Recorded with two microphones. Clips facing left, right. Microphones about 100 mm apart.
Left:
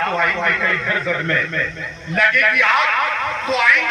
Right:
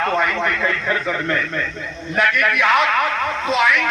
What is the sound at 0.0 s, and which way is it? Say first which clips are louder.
A man's voice: even; 10° right (ahead or behind).